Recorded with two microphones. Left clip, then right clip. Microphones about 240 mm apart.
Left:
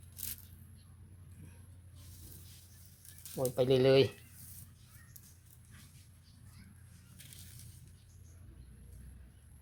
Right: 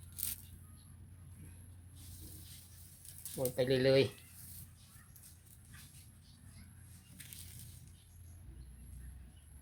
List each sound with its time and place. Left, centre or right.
3.3 s speech: centre